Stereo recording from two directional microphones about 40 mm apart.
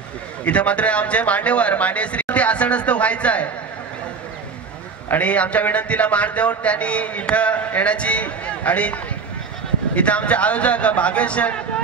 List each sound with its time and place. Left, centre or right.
0.5 s a man's voice: left
5.2 s a man's voice: left